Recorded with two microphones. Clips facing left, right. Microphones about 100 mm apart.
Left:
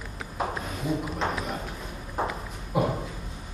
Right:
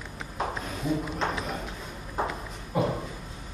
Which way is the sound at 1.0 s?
Centre (ahead or behind).